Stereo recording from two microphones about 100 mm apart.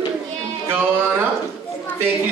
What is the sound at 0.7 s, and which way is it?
Speech, 20° right (ahead or behind).